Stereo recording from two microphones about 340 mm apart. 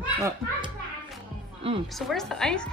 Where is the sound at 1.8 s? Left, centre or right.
Centre.